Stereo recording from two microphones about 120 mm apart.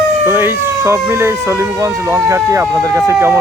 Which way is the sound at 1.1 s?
20° right (ahead or behind).